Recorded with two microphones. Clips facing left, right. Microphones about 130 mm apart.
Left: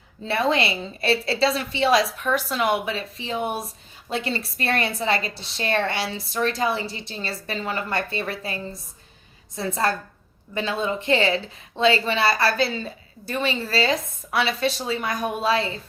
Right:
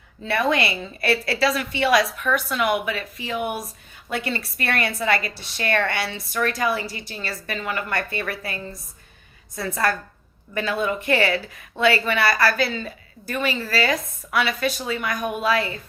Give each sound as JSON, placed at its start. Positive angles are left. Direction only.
{"t": 0.3, "sound": "a woman's voice", "side_deg": 25}